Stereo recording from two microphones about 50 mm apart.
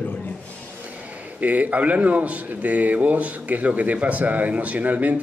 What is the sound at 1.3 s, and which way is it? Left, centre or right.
A man's voice, right.